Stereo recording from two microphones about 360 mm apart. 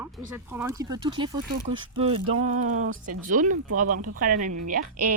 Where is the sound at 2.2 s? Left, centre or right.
Right.